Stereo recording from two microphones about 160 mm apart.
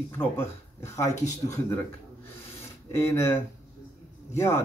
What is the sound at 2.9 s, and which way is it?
Speech, 15° left (ahead or behind).